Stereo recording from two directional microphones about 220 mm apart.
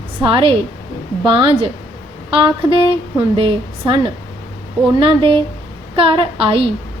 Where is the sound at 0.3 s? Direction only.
25° right (ahead or behind).